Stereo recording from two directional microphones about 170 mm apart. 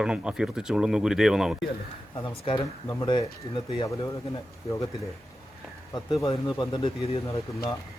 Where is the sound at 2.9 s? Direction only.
25° left (ahead or behind).